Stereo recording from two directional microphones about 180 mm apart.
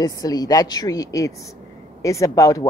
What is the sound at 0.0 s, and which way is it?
A woman's voice, 20° left (ahead or behind).